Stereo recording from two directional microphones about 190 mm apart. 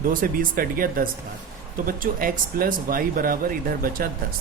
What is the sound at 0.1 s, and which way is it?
Speech, 45° right (ahead or behind).